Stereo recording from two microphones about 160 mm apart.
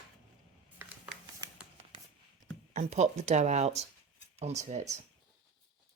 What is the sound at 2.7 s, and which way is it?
Speech, 45° right (ahead or behind).